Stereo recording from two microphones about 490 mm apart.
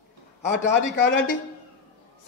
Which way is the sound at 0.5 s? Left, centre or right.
Centre.